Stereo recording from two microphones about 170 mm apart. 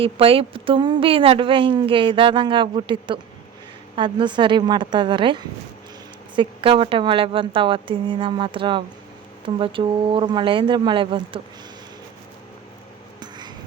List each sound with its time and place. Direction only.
0.0 s a woman's voice: 35° right (ahead or behind)